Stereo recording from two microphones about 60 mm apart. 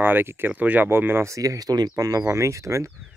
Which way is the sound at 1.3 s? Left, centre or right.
Right.